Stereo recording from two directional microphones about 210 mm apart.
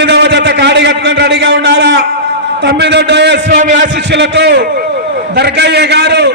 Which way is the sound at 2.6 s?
55° right (ahead or behind).